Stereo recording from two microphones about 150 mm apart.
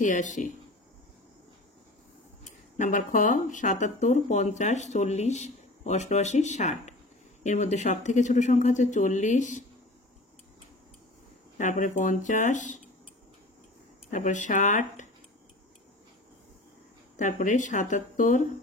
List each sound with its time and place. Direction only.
0.0 s speech: 55° left (ahead or behind)
2.8 s speech: 60° left (ahead or behind)
11.5 s speech: 55° left (ahead or behind)
14.1 s speech: 55° left (ahead or behind)
17.2 s speech: 55° left (ahead or behind)